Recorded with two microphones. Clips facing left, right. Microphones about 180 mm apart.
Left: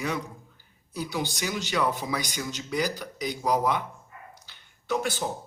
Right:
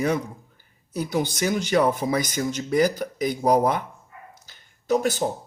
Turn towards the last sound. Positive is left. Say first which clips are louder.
# right 6 dB
turn(degrees=-40)  # may be behind; listen again after turning